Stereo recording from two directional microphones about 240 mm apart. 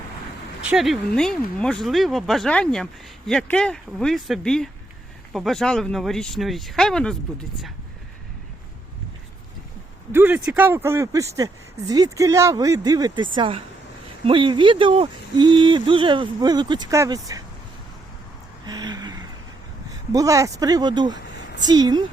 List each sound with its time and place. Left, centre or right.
0.6 s speech: centre
10.1 s speech: centre
18.6 s a sound: centre
19.9 s speech: centre